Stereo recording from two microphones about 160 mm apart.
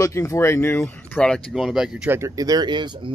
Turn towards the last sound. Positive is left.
turn(degrees=-30)  # may be behind; listen again after turning